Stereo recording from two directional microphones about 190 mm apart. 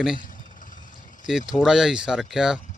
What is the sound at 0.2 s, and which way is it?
Vehicle, 45° left (ahead or behind).